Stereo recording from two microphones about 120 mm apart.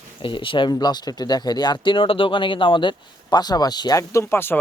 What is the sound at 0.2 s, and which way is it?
Speech, 45° left (ahead or behind).